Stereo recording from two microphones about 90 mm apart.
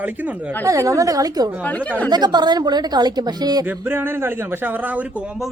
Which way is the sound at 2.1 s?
55° right (ahead or behind).